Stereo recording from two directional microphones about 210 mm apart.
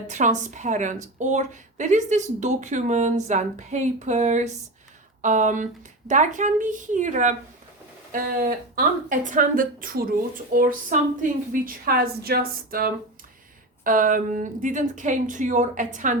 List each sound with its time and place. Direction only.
0.1 s speech: 35° right (ahead or behind)